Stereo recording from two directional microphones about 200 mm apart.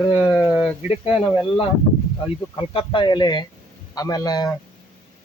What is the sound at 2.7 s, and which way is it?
A man's voice, 25° left (ahead or behind).